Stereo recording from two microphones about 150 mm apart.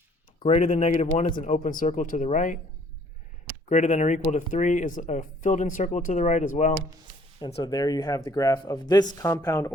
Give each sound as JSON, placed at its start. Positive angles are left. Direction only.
{"t": 0.4, "sound": "speech", "side_deg": 50}
{"t": 3.7, "sound": "speech", "side_deg": 50}
{"t": 7.3, "sound": "speech", "side_deg": 30}